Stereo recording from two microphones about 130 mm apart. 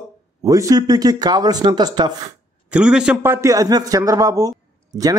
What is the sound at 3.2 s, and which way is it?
Speech, 20° right (ahead or behind).